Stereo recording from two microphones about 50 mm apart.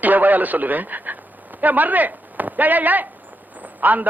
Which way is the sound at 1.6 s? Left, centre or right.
Right.